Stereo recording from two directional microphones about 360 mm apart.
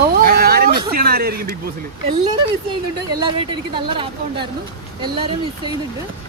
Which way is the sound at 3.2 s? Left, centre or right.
Centre.